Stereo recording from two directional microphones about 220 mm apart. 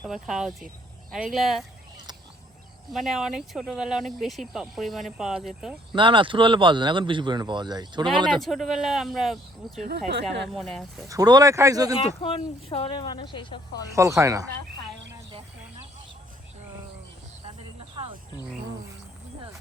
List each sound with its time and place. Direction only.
0.0 s speech: centre (ahead or behind)
2.9 s speech: centre (ahead or behind)
5.9 s speech: 20° right (ahead or behind)
8.3 s speech: centre (ahead or behind)
10.1 s speech: 50° right (ahead or behind)
10.5 s speech: centre (ahead or behind)
11.1 s speech: 15° right (ahead or behind)
11.9 s speech: 25° left (ahead or behind)
13.9 s speech: 15° right (ahead or behind)
17.9 s wild animals: 20° right (ahead or behind)